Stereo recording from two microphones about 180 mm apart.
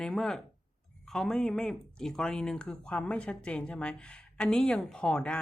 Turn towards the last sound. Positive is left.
turn(degrees=5)  # may be behind; listen again after turning